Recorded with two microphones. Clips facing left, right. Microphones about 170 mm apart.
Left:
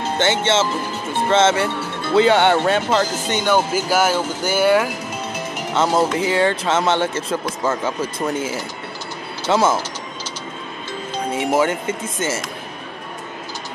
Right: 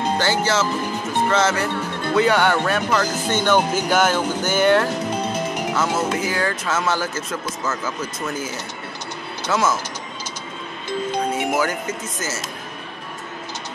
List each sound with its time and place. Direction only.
0.2 s speech: 25° left (ahead or behind); by 4.8 s 10° left (ahead or behind)
5.8 s speech: 30° left (ahead or behind)
11.3 s speech: 25° left (ahead or behind)